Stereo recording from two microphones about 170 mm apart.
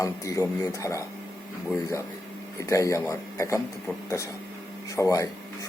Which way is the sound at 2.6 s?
20° left (ahead or behind).